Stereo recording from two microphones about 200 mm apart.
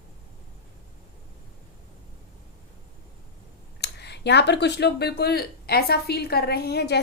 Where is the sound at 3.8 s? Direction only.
55° left (ahead or behind).